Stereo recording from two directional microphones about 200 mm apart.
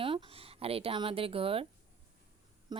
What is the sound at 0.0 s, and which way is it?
Speech, 25° right (ahead or behind).